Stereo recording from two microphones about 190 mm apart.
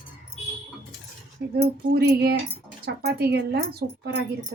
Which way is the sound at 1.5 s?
55° right (ahead or behind).